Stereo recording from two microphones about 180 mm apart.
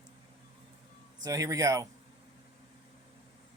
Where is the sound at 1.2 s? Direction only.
20° right (ahead or behind).